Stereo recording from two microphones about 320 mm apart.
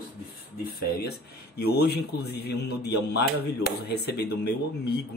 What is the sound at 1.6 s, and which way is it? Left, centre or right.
A man's voice, left.